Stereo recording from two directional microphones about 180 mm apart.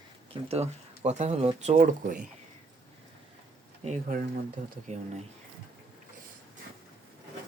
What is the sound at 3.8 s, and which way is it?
Speech, 45° right (ahead or behind).